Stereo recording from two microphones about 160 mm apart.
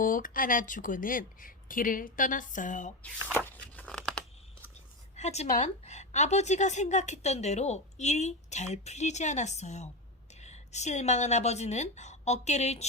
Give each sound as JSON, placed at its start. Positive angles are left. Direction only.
{"t": 0.0, "sound": "speech", "side_deg": 60}
{"t": 3.3, "sound": "a sound", "side_deg": 10}
{"t": 5.1, "sound": "a woman's voice", "side_deg": 45}